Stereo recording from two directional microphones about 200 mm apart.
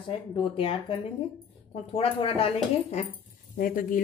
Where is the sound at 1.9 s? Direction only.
25° left (ahead or behind).